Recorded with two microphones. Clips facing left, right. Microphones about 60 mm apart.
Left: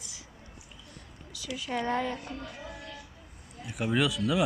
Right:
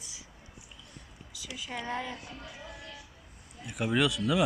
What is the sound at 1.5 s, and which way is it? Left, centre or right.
Speech, left.